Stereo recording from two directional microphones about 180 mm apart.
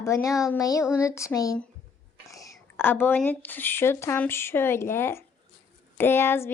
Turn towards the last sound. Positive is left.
turn(degrees=10)  # may be behind; listen again after turning